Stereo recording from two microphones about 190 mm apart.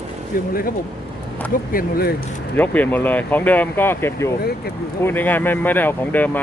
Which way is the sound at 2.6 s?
10° left (ahead or behind).